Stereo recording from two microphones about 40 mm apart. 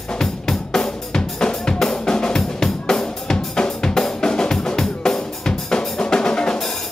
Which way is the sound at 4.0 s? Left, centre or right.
Centre.